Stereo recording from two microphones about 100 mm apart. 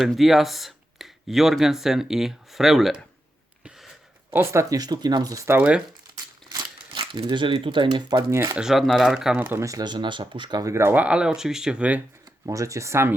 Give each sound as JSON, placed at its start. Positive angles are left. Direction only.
{"t": 0.0, "sound": "speech", "side_deg": 0}
{"t": 4.3, "sound": "speech", "side_deg": -25}
{"t": 4.7, "sound": "speech", "side_deg": -40}
{"t": 6.5, "sound": "speech", "side_deg": -50}
{"t": 8.3, "sound": "speech", "side_deg": -25}
{"t": 8.5, "sound": "speech", "side_deg": -5}
{"t": 9.4, "sound": "speech", "side_deg": -20}
{"t": 9.6, "sound": "speech", "side_deg": -40}
{"t": 11.0, "sound": "speech", "side_deg": -10}
{"t": 12.5, "sound": "speech", "side_deg": -30}